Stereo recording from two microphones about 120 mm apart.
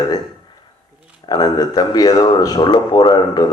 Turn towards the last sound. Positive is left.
turn(degrees=35)  # may be behind; listen again after turning